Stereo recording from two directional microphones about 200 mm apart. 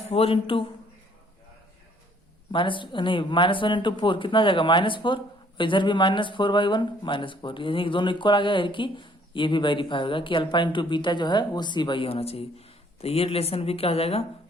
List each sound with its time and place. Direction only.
0.1 s speech: 30° left (ahead or behind)
2.5 s speech: 25° left (ahead or behind)